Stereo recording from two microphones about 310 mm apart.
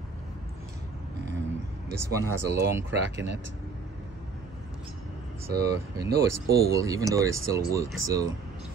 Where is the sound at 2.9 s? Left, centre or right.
Right.